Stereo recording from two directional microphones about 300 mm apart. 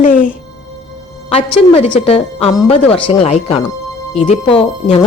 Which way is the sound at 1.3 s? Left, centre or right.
Centre.